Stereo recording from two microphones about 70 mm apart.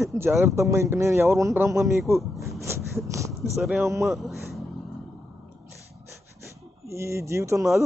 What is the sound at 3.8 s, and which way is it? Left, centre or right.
Speech, right.